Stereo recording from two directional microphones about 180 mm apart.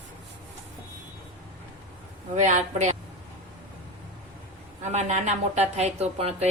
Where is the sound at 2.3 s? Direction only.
40° right (ahead or behind).